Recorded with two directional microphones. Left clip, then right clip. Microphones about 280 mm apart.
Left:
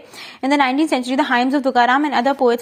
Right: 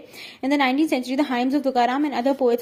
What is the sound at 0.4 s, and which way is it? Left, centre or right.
A woman's voice, centre.